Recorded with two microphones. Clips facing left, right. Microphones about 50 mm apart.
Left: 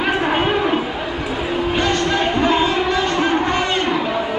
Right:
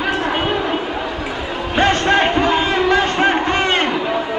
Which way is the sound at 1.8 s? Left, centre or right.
Right.